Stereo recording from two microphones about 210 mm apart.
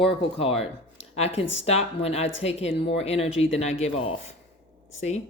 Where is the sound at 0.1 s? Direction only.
25° left (ahead or behind).